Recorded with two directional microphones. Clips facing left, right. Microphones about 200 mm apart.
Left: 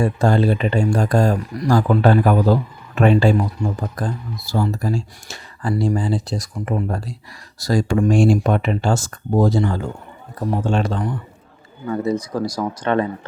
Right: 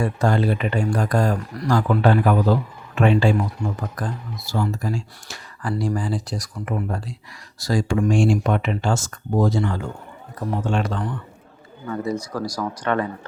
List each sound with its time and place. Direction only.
0.0 s a man's voice: 30° left (ahead or behind)
3.8 s speech: 30° left (ahead or behind)